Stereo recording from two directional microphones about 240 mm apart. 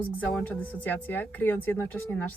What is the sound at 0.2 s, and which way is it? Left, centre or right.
A woman's voice, centre.